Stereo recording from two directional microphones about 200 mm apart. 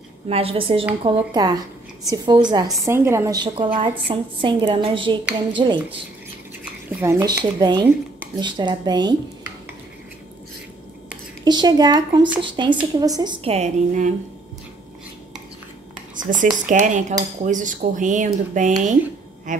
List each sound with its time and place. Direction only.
0.3 s a woman's voice: 30° right (ahead or behind)
6.6 s a woman's voice: 10° right (ahead or behind)
11.4 s a woman's voice: 20° right (ahead or behind)
16.2 s speech: 40° right (ahead or behind)
16.6 s cutlery: 40° right (ahead or behind)